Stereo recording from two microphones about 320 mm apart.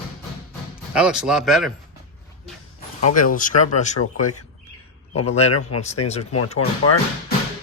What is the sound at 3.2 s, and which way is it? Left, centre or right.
Speech, left.